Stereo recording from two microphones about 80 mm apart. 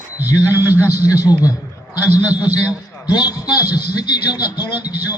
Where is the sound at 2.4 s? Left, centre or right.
Left.